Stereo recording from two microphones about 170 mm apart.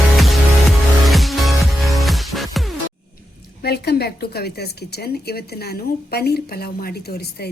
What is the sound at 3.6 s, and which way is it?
Speech, 70° left (ahead or behind).